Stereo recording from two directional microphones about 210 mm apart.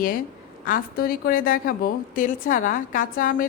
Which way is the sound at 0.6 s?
45° left (ahead or behind).